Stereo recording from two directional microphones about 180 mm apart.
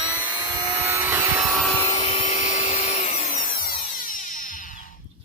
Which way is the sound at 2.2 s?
40° left (ahead or behind).